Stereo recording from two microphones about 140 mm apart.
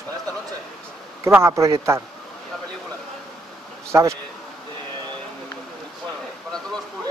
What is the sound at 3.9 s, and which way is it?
Speech, 20° right (ahead or behind).